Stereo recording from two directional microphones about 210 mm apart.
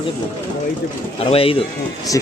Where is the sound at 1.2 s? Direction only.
25° left (ahead or behind).